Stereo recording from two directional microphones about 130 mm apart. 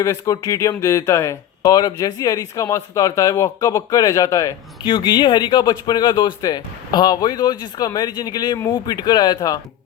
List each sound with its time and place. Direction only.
0.0 s speech: 25° left (ahead or behind)
4.9 s speech: 35° left (ahead or behind)